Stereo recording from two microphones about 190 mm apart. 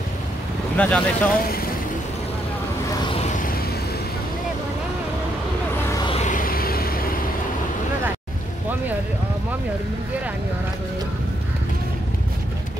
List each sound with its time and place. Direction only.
0.7 s speech: 5° left (ahead or behind)
3.2 s vehicle: 40° left (ahead or behind)
6.0 s a sound: 35° left (ahead or behind)